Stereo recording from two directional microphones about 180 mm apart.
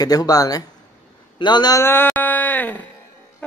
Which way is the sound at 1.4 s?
25° left (ahead or behind).